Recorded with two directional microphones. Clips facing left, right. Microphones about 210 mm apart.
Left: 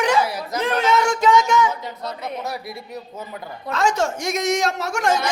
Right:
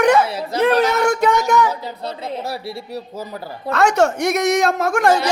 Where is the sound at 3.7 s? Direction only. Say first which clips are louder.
Right 5 dB; 65° right (ahead or behind).